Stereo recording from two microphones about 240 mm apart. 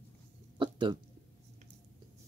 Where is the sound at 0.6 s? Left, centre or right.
Centre.